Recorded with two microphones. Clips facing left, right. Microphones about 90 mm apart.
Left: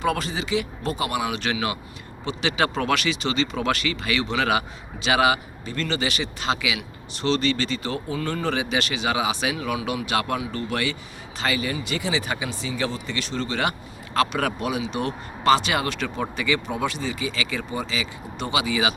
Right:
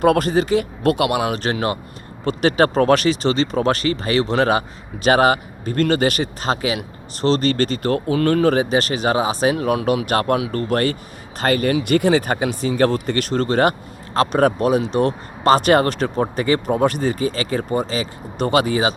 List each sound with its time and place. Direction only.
0.0 s speech: 50° right (ahead or behind)
0.9 s speech: 65° right (ahead or behind)
1.4 s speech: 40° right (ahead or behind)